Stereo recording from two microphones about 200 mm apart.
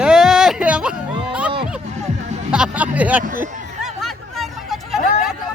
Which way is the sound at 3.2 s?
40° right (ahead or behind).